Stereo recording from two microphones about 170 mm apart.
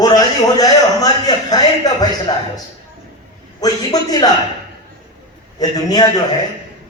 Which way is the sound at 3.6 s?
20° left (ahead or behind).